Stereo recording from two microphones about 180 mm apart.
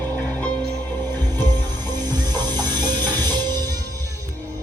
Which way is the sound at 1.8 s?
20° right (ahead or behind).